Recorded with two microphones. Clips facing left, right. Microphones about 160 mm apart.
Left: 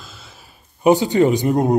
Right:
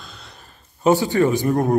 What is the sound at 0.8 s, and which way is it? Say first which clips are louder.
Speech: left 2 dB; 20° left (ahead or behind).